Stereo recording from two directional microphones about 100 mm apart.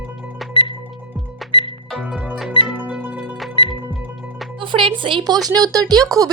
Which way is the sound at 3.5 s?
55° left (ahead or behind).